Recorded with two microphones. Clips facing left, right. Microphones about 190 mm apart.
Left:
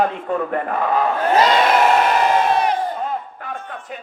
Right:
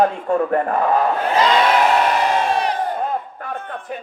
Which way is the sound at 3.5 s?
60° right (ahead or behind).